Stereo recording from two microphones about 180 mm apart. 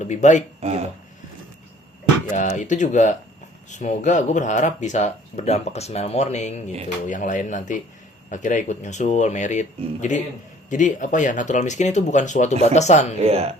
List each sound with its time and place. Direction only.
0.0 s speech: 40° left (ahead or behind)
2.3 s speech: 45° left (ahead or behind)
13.1 s speech: 35° right (ahead or behind)